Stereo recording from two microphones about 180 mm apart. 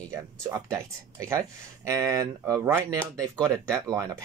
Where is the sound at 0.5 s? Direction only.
20° right (ahead or behind).